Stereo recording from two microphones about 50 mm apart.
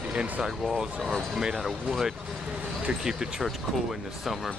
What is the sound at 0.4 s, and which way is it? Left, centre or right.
Speech, centre.